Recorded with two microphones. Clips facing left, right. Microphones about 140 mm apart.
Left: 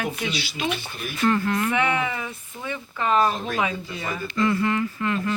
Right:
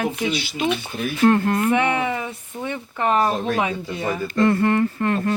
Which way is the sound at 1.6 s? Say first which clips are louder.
Right 4 dB; 25° right (ahead or behind).